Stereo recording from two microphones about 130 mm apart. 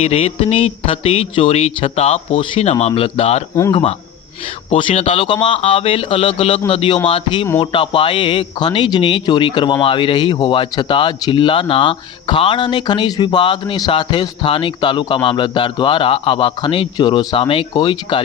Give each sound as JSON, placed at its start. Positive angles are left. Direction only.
{"t": 0.0, "sound": "speech", "side_deg": 55}
{"t": 3.7, "sound": "speech", "side_deg": 40}